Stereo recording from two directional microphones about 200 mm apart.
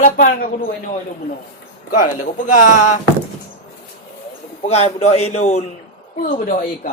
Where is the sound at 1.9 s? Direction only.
40° left (ahead or behind).